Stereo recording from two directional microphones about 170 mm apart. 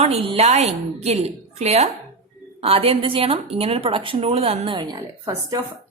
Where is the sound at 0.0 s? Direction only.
35° right (ahead or behind).